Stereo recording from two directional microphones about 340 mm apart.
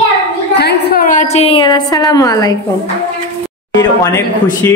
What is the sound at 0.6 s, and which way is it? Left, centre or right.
A woman's voice, left.